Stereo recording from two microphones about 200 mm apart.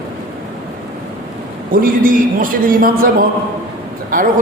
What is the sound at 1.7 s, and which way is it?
A man's voice, 45° right (ahead or behind).